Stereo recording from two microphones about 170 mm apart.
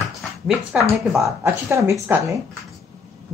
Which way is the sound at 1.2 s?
15° right (ahead or behind).